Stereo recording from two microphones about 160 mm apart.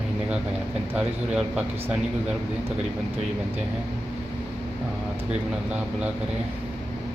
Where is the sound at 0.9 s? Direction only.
5° right (ahead or behind).